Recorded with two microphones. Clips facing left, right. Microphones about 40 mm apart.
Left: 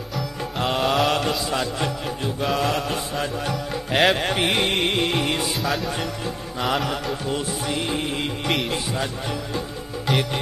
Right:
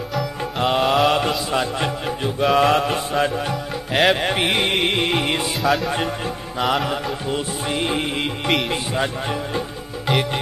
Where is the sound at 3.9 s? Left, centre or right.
Centre.